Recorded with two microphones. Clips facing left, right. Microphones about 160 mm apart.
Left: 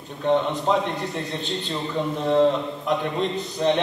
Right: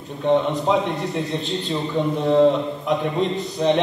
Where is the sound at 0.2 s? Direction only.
Centre (ahead or behind).